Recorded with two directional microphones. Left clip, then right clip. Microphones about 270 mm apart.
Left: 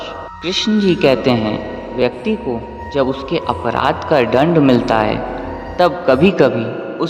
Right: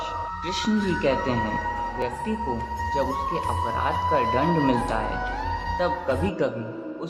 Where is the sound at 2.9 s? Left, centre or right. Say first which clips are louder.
Left 9 dB; left.